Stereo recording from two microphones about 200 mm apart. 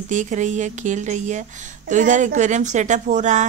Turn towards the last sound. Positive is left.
turn(degrees=-35)  # may be behind; listen again after turning